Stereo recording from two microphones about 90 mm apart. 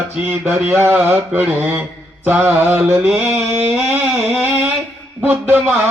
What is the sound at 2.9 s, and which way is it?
Mantra, 10° right (ahead or behind).